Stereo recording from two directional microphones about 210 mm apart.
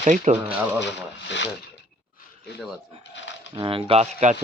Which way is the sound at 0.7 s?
55° left (ahead or behind).